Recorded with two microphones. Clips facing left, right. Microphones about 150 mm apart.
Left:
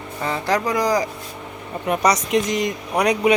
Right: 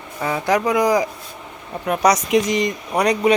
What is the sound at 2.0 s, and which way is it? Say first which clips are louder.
Speech: right 3 dB; 5° right (ahead or behind).